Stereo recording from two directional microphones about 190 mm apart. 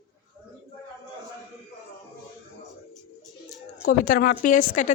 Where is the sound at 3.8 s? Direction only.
50° left (ahead or behind).